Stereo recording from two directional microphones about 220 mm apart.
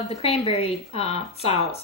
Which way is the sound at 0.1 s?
25° left (ahead or behind).